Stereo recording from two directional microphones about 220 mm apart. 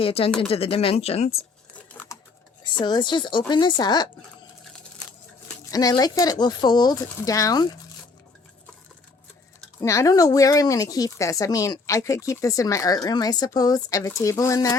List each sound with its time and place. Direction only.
0.0 s speech: 25° left (ahead or behind)
1.9 s typing: 10° left (ahead or behind)
2.8 s speech: 20° left (ahead or behind)
5.7 s a woman's voice: 15° left (ahead or behind)
9.8 s a woman's voice: 15° left (ahead or behind)